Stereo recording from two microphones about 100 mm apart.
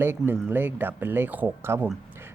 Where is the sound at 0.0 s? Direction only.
20° right (ahead or behind).